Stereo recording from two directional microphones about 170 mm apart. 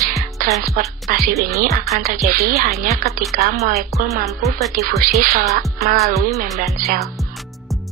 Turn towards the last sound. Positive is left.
turn(degrees=-55)  # may be behind; listen again after turning